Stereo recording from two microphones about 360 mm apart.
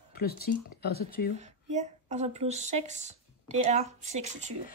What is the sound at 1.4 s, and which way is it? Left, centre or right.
Speech, centre.